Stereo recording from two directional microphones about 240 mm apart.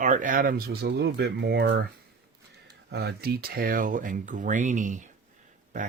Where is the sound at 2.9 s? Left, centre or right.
Right.